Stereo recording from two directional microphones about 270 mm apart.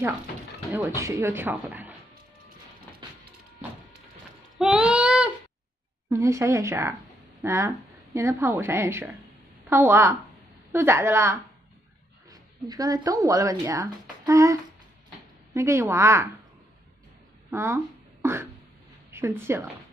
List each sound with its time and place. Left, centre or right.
0.7 s a woman's voice: centre
4.6 s a sound: centre
6.0 s a woman's voice: centre
17.5 s speech: centre
18.2 s beatboxing: centre
19.1 s a woman's voice: centre